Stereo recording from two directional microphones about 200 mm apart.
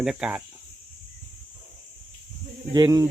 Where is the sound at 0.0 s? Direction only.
5° right (ahead or behind).